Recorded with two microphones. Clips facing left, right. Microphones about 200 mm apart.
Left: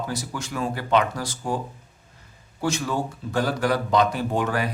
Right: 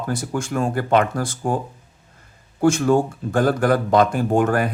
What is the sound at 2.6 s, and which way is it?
Speech, 50° right (ahead or behind).